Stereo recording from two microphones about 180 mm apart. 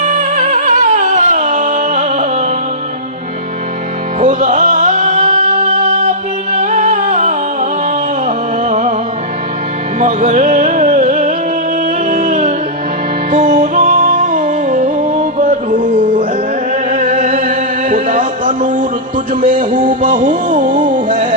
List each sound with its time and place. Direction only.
0.1 s music: 45° right (ahead or behind)
4.2 s music: 45° right (ahead or behind)
10.0 s music: 40° right (ahead or behind)
15.2 s music: 35° right (ahead or behind)